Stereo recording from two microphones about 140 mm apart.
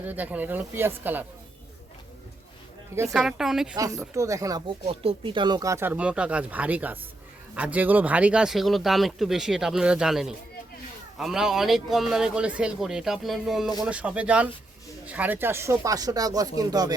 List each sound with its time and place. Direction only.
0.0 s speech: 10° right (ahead or behind)
3.1 s speech: 5° right (ahead or behind)
3.8 s speech: 25° right (ahead or behind)
4.9 s speech: 40° right (ahead or behind)